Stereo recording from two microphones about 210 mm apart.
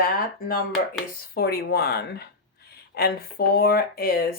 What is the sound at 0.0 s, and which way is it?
Speech, 45° left (ahead or behind).